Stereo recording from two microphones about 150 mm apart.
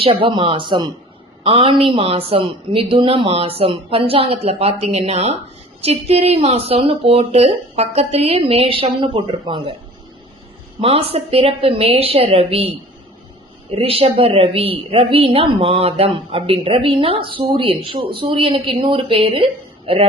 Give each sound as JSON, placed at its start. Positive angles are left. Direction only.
{"t": 0.0, "sound": "a woman's voice", "side_deg": -35}
{"t": 10.8, "sound": "a woman's voice", "side_deg": -40}
{"t": 13.7, "sound": "a woman's voice", "side_deg": -40}